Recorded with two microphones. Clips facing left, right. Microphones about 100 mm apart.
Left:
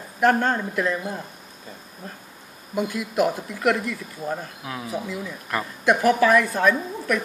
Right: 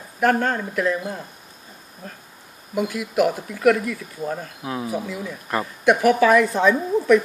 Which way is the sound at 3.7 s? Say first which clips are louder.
Right 3 dB; centre (ahead or behind).